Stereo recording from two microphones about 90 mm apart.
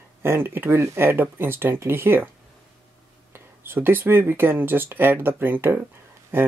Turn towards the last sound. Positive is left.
turn(degrees=-25)  # may be behind; listen again after turning